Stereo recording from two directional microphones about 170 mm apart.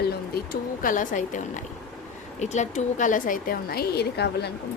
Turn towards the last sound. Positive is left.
turn(degrees=75)  # may be behind; listen again after turning